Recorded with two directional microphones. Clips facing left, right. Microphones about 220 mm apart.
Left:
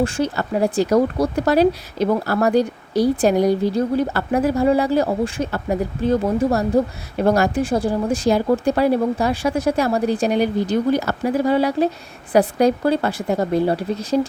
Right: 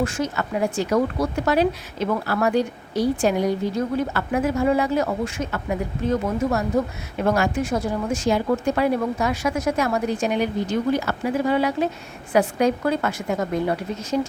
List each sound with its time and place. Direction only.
0.0 s speech: 30° left (ahead or behind)